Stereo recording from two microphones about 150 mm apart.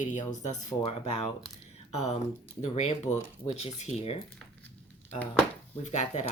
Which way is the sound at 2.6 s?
45° left (ahead or behind).